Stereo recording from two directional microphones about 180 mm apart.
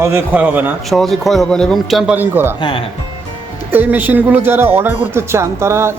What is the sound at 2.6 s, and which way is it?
Speech, 30° left (ahead or behind).